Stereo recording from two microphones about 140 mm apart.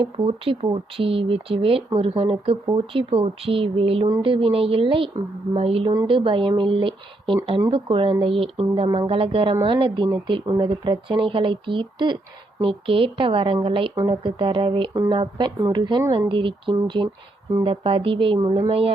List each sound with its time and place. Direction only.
0.2 s speech: 45° right (ahead or behind)
13.9 s a woman's voice: 25° right (ahead or behind)
14.3 s speech: 35° right (ahead or behind)
18.3 s a woman's voice: 25° right (ahead or behind)